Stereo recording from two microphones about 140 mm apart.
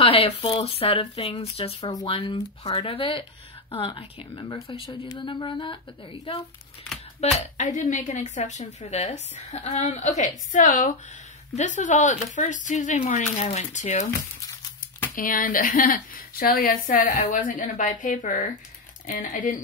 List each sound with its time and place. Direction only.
0.0 s speech: 40° left (ahead or behind)
1.9 s speech: 35° left (ahead or behind)
7.2 s a woman's voice: 60° left (ahead or behind)
15.1 s a woman's voice: 80° left